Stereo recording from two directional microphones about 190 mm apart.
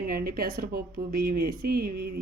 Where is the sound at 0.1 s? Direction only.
50° right (ahead or behind).